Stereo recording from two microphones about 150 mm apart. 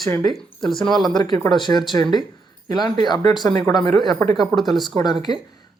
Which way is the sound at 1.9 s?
30° left (ahead or behind).